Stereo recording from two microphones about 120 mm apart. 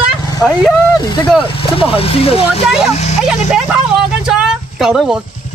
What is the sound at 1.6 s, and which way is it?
Speech, 50° left (ahead or behind).